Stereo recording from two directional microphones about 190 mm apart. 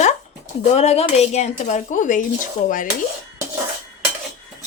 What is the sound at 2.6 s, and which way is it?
Dishes, 45° left (ahead or behind).